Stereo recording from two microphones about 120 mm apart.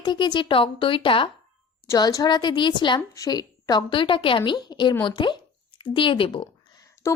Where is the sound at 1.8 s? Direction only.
25° left (ahead or behind); by 6.4 s 45° left (ahead or behind).